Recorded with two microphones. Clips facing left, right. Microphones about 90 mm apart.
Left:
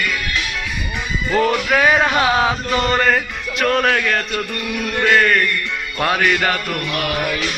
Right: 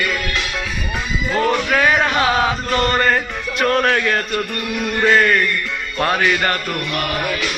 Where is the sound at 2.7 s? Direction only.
Centre (ahead or behind).